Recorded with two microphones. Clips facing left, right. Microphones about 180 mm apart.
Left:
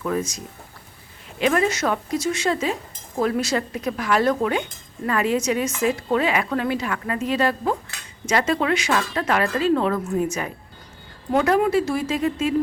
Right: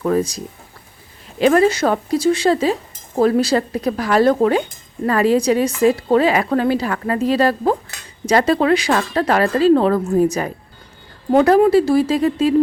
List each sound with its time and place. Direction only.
0.0 s a woman's voice: 35° right (ahead or behind)